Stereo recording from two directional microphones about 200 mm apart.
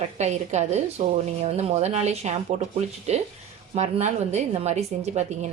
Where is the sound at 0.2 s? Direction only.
35° right (ahead or behind).